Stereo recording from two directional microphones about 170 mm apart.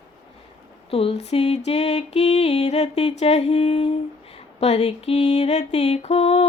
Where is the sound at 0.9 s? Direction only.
35° left (ahead or behind).